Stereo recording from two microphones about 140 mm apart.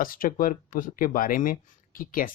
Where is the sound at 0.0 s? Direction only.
90° left.